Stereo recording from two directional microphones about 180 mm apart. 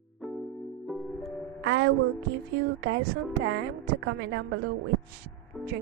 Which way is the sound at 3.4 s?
90° right.